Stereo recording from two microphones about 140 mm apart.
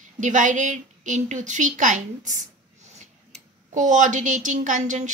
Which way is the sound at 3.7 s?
60° right (ahead or behind).